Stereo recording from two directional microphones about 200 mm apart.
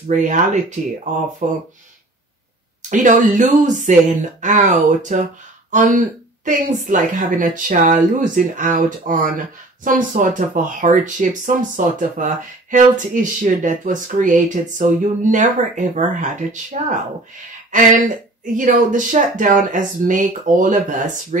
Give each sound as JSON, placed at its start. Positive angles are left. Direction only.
{"t": 0.1, "sound": "speech", "side_deg": -35}
{"t": 2.9, "sound": "speech", "side_deg": -40}